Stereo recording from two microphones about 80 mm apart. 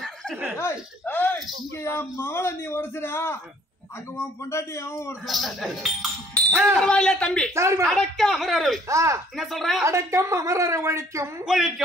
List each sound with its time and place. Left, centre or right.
0.0 s dog: centre
0.6 s a man's voice: left
5.2 s speech: centre
6.8 s speech: centre
7.5 s a woman's voice: right
7.8 s speech: centre
8.8 s a woman's voice: right
9.4 s speech: centre
9.8 s a woman's voice: right
11.4 s speech: centre